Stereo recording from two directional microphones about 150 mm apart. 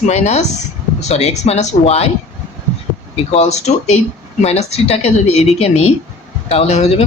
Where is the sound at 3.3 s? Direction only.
45° left (ahead or behind).